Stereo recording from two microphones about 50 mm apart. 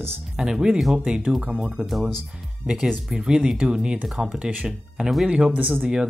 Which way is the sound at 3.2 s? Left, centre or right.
Centre.